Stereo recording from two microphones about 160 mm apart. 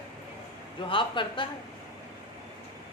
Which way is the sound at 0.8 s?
30° left (ahead or behind).